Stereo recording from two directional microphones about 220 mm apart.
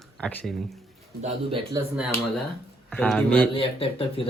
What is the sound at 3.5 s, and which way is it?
Speech, 25° left (ahead or behind).